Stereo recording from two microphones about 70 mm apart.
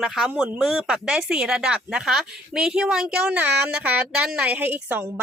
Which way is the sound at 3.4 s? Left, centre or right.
Right.